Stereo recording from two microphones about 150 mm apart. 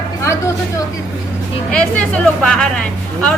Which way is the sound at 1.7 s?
10° left (ahead or behind).